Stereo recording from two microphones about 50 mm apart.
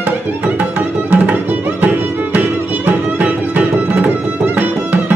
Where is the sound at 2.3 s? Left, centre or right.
Right.